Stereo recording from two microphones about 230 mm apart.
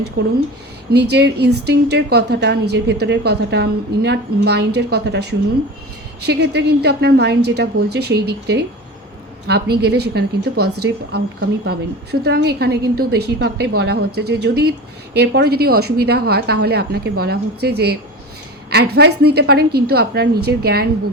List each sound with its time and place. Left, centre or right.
0.2 s a woman's voice: right